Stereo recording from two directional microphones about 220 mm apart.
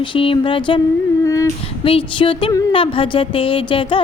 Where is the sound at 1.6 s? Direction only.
25° left (ahead or behind).